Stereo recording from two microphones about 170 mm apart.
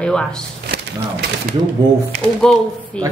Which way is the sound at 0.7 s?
65° right (ahead or behind).